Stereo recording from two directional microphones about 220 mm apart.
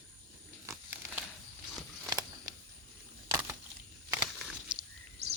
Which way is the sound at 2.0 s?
15° right (ahead or behind).